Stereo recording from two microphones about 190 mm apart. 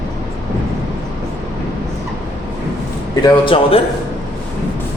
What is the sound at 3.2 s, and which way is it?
Speech, 25° left (ahead or behind).